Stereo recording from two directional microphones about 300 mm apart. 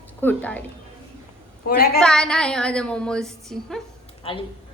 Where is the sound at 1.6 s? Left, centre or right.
Left.